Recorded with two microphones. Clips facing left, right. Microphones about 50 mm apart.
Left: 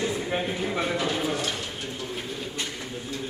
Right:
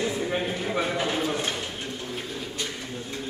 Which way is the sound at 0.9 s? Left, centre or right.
Right.